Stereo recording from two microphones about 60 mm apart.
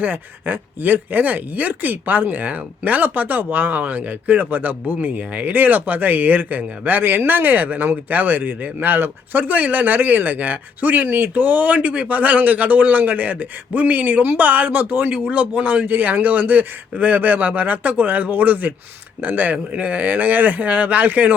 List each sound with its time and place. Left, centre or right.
0.0 s speech: right